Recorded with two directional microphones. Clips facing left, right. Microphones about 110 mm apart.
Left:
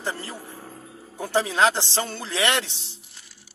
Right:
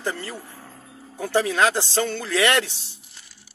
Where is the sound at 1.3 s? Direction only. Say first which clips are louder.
Right 1 dB; 25° left (ahead or behind).